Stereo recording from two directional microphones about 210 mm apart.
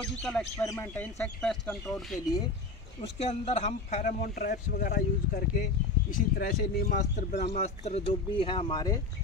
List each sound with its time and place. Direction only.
0.2 s speech: centre (ahead or behind)
0.6 s speech: 15° left (ahead or behind)
3.2 s a man's voice: 30° left (ahead or behind)
4.4 s speech: 45° left (ahead or behind); by 9.0 s 20° left (ahead or behind)